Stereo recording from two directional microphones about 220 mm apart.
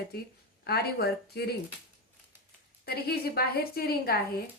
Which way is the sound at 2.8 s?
45° left (ahead or behind).